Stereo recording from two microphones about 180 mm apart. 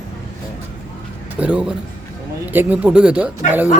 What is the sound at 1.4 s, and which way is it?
Speech, 5° right (ahead or behind).